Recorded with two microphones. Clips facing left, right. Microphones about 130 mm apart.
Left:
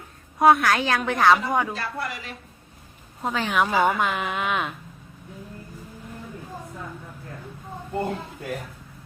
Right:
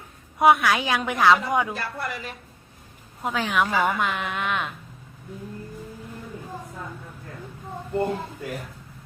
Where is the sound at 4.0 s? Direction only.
Centre (ahead or behind).